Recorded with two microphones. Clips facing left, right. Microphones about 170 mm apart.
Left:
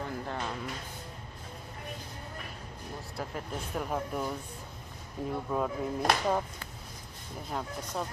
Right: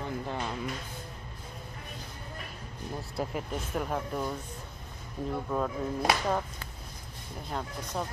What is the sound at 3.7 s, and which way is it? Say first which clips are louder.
Speech: right 1 dB; 5° left (ahead or behind).